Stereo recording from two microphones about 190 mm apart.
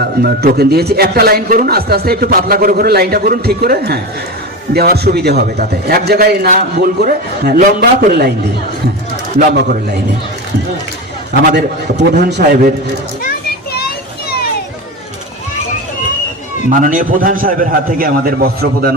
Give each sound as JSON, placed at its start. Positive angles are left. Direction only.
{"t": 0.0, "sound": "a man's voice", "side_deg": -55}
{"t": 9.5, "sound": "a man's voice", "side_deg": -55}
{"t": 11.5, "sound": "a man's voice", "side_deg": -55}
{"t": 16.6, "sound": "a man's voice", "side_deg": -45}